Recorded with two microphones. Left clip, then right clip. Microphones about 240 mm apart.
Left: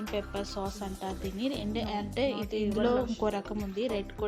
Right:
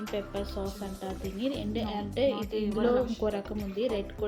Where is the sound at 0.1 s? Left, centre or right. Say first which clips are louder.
Even; left.